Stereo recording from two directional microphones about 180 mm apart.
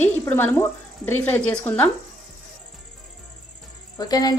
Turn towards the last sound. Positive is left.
turn(degrees=20)  # may be behind; listen again after turning